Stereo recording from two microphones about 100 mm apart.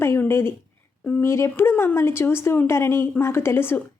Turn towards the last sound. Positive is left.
turn(degrees=25)  # may be behind; listen again after turning